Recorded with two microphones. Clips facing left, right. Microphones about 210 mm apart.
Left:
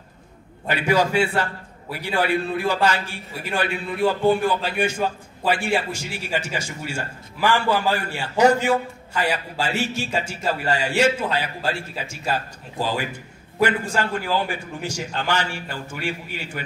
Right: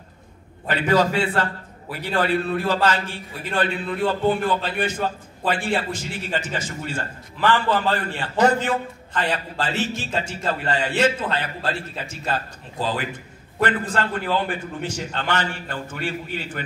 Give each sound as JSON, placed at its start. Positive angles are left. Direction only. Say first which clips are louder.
{"t": 0.7, "sound": "a man's voice", "louder": "right 1 dB", "side_deg": 10}